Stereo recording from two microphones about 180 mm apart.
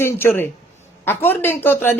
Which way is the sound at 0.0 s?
10° left (ahead or behind).